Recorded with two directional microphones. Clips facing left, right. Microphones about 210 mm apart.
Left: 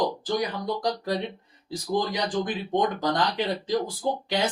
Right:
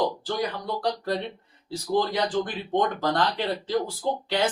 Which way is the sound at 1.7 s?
15° left (ahead or behind).